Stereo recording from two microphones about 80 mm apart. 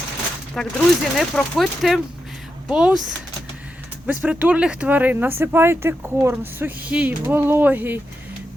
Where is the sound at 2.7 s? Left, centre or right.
Centre.